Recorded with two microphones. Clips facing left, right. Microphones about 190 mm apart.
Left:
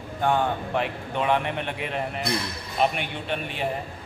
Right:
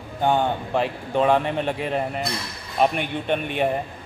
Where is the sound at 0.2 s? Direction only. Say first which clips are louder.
Right 2 dB; 30° right (ahead or behind).